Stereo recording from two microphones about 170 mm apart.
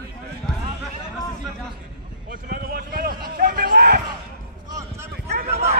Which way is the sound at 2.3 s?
60° right (ahead or behind).